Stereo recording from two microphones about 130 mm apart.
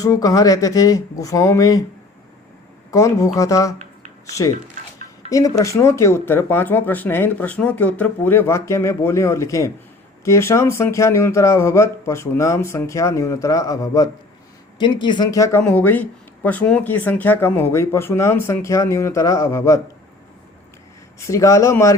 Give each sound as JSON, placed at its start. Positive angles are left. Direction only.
{"t": 0.0, "sound": "speech", "side_deg": 25}
{"t": 2.9, "sound": "speech", "side_deg": 25}
{"t": 14.8, "sound": "speech", "side_deg": 35}
{"t": 15.7, "sound": "speech", "side_deg": 15}
{"t": 21.2, "sound": "speech", "side_deg": 25}